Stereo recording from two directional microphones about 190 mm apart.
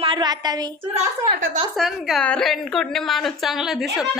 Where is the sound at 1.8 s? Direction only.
Centre (ahead or behind).